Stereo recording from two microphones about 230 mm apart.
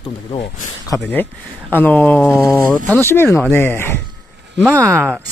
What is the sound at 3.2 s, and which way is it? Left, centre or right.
Speech, centre.